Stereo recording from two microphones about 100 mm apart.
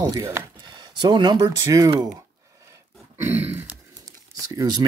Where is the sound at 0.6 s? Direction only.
50° right (ahead or behind).